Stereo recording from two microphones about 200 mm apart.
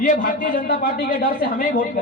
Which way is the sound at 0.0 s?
40° left (ahead or behind).